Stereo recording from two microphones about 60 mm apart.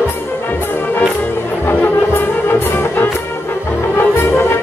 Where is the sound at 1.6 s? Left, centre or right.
Left.